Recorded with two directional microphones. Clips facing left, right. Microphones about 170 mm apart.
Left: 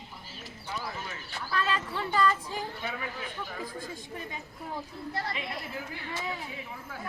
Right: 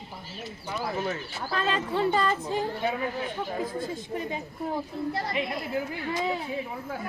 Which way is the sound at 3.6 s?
25° right (ahead or behind).